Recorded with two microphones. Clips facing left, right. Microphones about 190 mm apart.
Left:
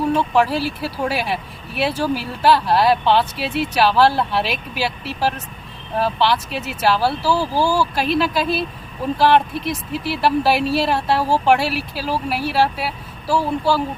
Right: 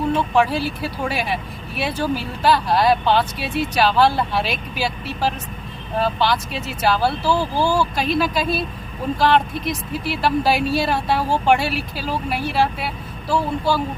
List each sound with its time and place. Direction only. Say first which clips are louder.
0.3 s speech: left 1 dB; 5° left (ahead or behind)